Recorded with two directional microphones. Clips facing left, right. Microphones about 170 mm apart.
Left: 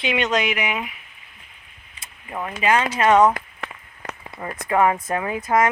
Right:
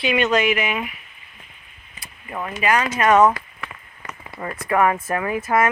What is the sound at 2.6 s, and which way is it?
Speech, 25° left (ahead or behind).